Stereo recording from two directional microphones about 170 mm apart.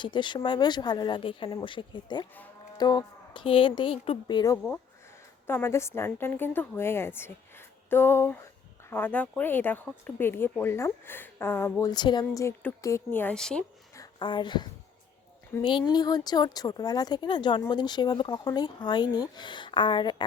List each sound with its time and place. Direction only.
0.0 s speech: 30° left (ahead or behind)
4.5 s a woman's voice: 10° left (ahead or behind)
13.9 s a sound: 25° left (ahead or behind)
15.6 s speech: 25° left (ahead or behind)